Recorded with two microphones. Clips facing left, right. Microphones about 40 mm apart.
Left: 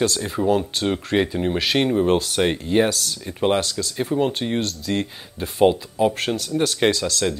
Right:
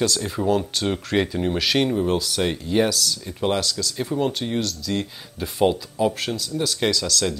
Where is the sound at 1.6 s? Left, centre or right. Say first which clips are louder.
Even; left.